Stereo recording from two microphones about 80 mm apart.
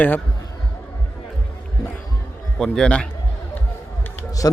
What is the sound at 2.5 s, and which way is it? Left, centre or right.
Speech, centre.